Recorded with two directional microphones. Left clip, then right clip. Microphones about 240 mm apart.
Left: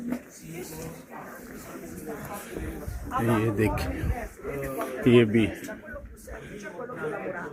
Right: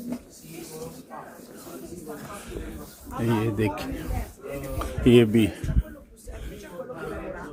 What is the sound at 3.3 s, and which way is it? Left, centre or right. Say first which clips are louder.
Speech: left 1 dB; centre.